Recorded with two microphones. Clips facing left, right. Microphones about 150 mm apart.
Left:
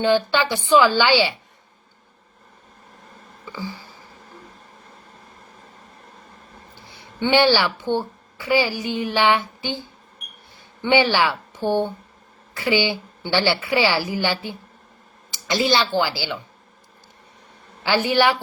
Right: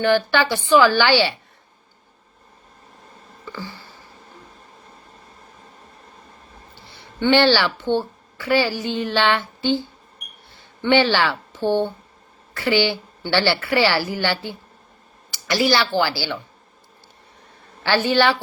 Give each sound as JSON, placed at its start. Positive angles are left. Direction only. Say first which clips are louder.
{"t": 0.0, "sound": "a woman's voice", "louder": "right 1 dB", "side_deg": 20}
{"t": 3.4, "sound": "a sound", "louder": "left 1 dB", "side_deg": 10}
{"t": 6.8, "sound": "a woman's voice", "louder": "right 4 dB", "side_deg": 15}
{"t": 10.9, "sound": "a woman's voice", "louder": "even", "side_deg": 10}
{"t": 17.8, "sound": "a woman's voice", "louder": "right 1 dB", "side_deg": 15}